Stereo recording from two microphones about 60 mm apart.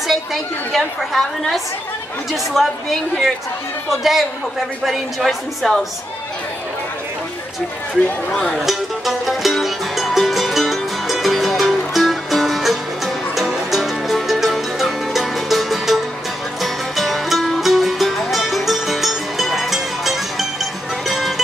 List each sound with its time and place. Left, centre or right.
0.1 s a woman's voice: centre
8.3 s speech: centre
8.5 s music: centre